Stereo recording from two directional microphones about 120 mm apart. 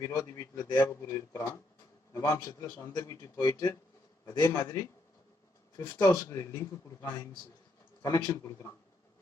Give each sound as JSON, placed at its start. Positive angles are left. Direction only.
{"t": 0.0, "sound": "a man's voice", "side_deg": 30}
{"t": 6.2, "sound": "a man's voice", "side_deg": 20}